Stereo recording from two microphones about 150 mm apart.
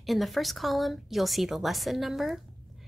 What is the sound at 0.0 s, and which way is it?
Speech, centre (ahead or behind).